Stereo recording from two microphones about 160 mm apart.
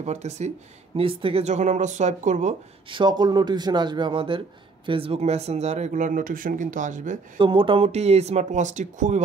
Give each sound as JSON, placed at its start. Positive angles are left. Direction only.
{"t": 0.0, "sound": "speech", "side_deg": -45}
{"t": 2.9, "sound": "speech", "side_deg": -30}
{"t": 7.3, "sound": "speech", "side_deg": -30}